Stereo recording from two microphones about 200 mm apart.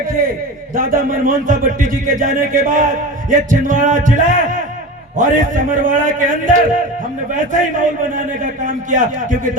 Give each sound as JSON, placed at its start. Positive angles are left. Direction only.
{"t": 0.2, "sound": "a man's voice", "side_deg": -45}